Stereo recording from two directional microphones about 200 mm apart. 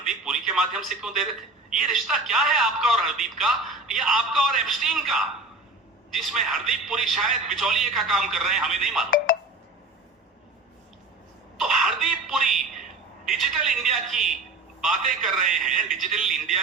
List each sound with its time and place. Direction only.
0.0 s a man's voice: 5° right (ahead or behind)
9.0 s speech: 45° left (ahead or behind)
11.5 s cough: centre (ahead or behind)
13.2 s speech: centre (ahead or behind)
15.4 s speech: centre (ahead or behind)